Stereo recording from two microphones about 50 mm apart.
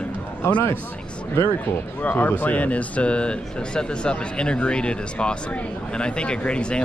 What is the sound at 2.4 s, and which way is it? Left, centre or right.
Speech, left.